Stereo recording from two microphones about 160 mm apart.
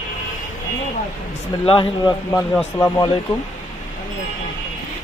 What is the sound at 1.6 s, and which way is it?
Speech, 30° left (ahead or behind).